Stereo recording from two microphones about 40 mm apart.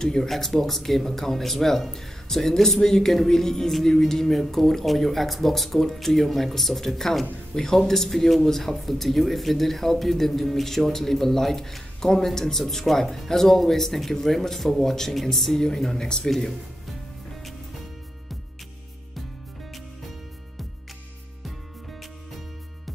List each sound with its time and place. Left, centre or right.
0.0 s speech: centre